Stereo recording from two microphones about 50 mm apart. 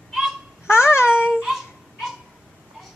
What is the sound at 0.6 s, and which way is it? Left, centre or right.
Babbling, left.